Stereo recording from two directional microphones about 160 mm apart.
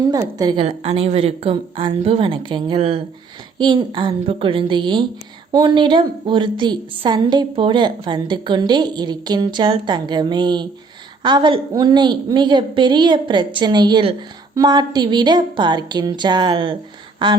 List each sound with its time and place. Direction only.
0.0 s a woman's voice: 25° right (ahead or behind)
0.6 s a woman's voice: 40° right (ahead or behind)